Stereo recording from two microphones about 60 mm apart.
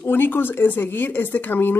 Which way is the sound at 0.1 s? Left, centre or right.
Left.